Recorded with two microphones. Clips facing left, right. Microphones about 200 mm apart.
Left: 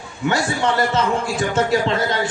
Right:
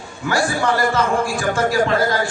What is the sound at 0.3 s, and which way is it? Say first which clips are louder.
A man's voice: right 1 dB; 25° left (ahead or behind).